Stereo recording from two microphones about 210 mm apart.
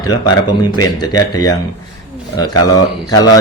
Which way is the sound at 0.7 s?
20° left (ahead or behind).